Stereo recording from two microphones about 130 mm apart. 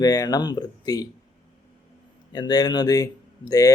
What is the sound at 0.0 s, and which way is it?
Speech, 30° left (ahead or behind).